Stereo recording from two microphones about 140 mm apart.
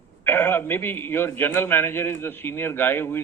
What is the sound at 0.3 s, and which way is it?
A man's voice, 15° left (ahead or behind).